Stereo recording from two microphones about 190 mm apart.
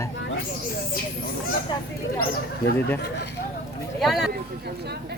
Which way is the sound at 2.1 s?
50° left (ahead or behind).